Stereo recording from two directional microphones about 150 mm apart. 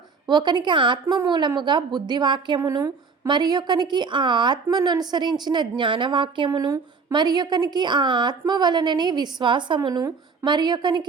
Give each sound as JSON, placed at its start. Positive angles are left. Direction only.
{"t": 0.3, "sound": "a woman's voice", "side_deg": -30}